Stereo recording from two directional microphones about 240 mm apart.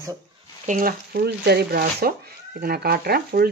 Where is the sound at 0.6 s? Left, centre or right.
Right.